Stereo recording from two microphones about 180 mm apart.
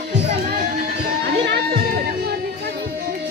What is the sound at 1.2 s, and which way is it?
Crowd, 70° right (ahead or behind).